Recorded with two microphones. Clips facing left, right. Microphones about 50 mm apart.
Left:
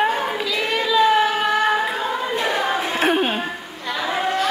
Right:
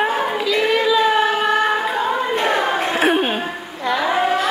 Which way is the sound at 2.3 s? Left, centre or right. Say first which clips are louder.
Right 3 dB; right.